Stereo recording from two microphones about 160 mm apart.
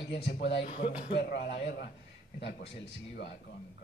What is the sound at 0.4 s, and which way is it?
Speech, 90° left.